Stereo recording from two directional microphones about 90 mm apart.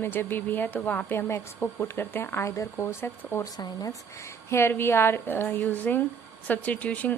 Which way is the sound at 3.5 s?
45° left (ahead or behind).